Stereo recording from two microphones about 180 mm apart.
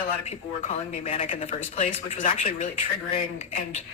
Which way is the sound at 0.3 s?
35° left (ahead or behind).